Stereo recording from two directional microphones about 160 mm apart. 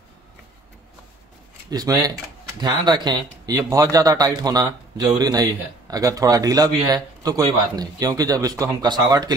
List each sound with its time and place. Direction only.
1.7 s speech: 25° right (ahead or behind)